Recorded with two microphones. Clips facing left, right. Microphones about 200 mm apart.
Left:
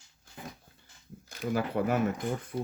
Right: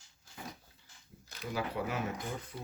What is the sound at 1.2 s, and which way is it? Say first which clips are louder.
Speech: left 6 dB; 50° left (ahead or behind).